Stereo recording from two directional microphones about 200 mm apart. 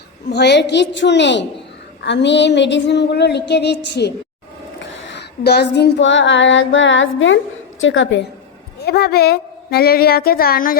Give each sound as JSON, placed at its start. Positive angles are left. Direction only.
{"t": 0.3, "sound": "a sound", "side_deg": 55}
{"t": 4.9, "sound": "female singing", "side_deg": 65}
{"t": 8.8, "sound": "a woman's voice", "side_deg": 50}